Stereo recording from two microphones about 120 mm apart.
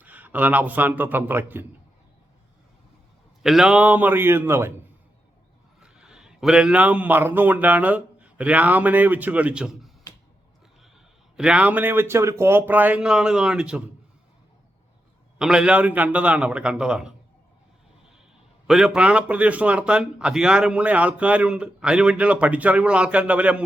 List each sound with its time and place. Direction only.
0.0 s a man's voice: 15° right (ahead or behind)
3.4 s a man's voice: 5° right (ahead or behind); by 4.7 s 20° right (ahead or behind)
5.8 s speech: 5° right (ahead or behind)
11.3 s a man's voice: 10° right (ahead or behind)
15.4 s a man's voice: 5° right (ahead or behind)
18.7 s a man's voice: 5° right (ahead or behind)